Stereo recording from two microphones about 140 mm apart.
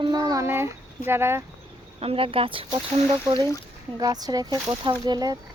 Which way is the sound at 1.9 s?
40° right (ahead or behind).